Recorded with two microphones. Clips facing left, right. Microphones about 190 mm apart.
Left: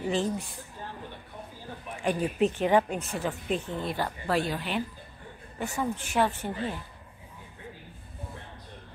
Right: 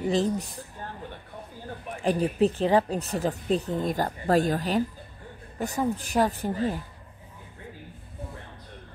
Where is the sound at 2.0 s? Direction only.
35° right (ahead or behind).